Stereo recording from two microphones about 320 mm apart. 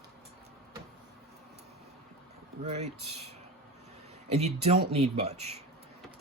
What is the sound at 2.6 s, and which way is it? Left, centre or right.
Speech, right.